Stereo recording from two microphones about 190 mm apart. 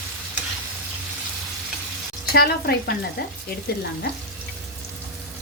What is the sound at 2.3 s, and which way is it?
Speech, 55° left (ahead or behind).